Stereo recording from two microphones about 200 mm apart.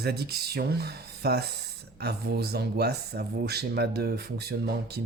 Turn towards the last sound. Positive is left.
turn(degrees=-55)  # may be behind; listen again after turning